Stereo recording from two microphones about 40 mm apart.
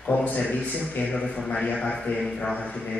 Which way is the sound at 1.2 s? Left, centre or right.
Centre.